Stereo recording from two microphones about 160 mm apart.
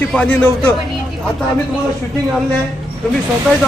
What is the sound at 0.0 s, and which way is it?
Speech, 10° left (ahead or behind).